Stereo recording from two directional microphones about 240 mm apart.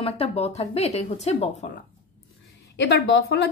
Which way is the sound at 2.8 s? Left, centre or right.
Left.